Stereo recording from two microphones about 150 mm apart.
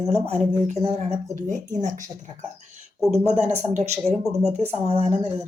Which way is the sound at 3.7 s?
45° right (ahead or behind).